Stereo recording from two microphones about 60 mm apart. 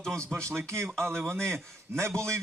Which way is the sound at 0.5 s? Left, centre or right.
Right.